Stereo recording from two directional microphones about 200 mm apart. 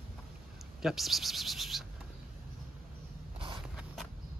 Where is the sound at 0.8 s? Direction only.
Centre (ahead or behind).